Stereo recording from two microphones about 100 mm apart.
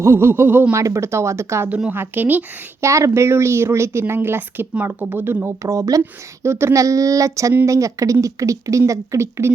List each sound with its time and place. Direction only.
0.0 s speech: 25° right (ahead or behind)
0.8 s speech: 30° right (ahead or behind)
1.7 s a woman's voice: 15° right (ahead or behind)
2.8 s speech: 30° right (ahead or behind)